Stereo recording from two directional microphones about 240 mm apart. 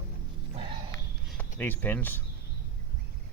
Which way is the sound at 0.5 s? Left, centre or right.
Right.